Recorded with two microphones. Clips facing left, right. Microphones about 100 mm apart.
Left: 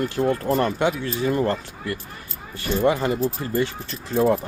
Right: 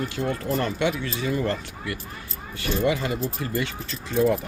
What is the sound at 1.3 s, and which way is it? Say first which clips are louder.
Speech: left 4 dB; 45° left (ahead or behind).